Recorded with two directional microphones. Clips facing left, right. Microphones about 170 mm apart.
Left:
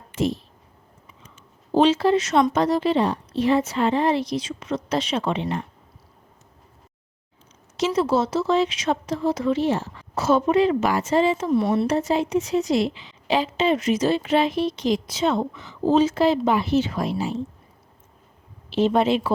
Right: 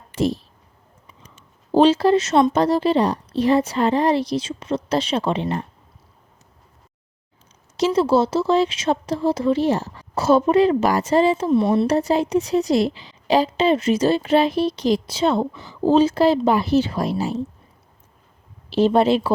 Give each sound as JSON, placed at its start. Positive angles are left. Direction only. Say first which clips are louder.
{"t": 0.1, "sound": "a sound", "louder": "right 2 dB", "side_deg": -35}
{"t": 1.7, "sound": "a woman's voice", "louder": "right 3 dB", "side_deg": -35}
{"t": 7.8, "sound": "a woman's voice", "louder": "right 4 dB", "side_deg": -30}
{"t": 11.9, "sound": "a woman's voice", "louder": "right 3 dB", "side_deg": -35}
{"t": 18.7, "sound": "a woman's voice", "louder": "right 3 dB", "side_deg": -35}